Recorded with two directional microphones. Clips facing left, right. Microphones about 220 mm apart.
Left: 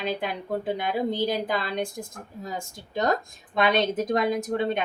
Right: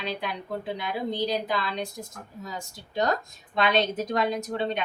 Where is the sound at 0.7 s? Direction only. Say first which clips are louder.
Left 3 dB; 50° left (ahead or behind).